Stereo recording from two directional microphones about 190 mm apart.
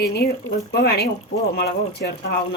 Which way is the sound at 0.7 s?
55° left (ahead or behind).